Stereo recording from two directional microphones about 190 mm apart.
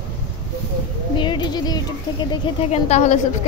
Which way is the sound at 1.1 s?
25° left (ahead or behind).